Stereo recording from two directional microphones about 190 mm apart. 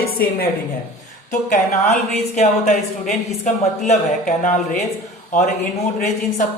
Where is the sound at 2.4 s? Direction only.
35° left (ahead or behind).